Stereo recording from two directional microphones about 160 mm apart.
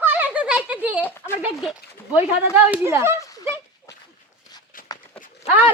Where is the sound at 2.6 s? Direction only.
15° right (ahead or behind).